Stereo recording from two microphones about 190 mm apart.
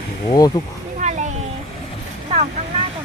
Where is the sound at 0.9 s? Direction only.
40° right (ahead or behind).